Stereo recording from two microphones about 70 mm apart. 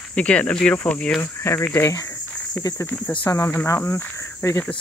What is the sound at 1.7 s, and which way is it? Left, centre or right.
Speech, left.